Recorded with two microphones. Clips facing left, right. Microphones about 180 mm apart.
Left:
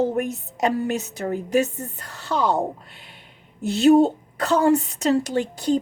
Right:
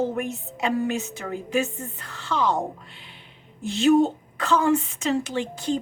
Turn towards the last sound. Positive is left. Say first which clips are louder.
# left 4 dB
turn(degrees=40)  # may be behind; listen again after turning